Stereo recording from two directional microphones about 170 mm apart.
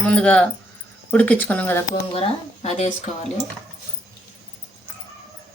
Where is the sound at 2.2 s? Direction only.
40° left (ahead or behind).